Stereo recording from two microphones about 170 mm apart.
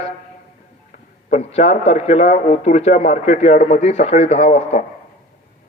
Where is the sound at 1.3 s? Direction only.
40° left (ahead or behind).